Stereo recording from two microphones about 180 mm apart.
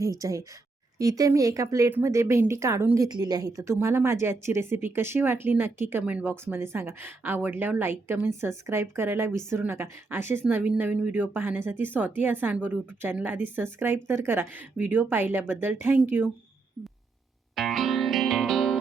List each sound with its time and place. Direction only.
0.0 s speech: 20° right (ahead or behind)
17.5 s music: centre (ahead or behind)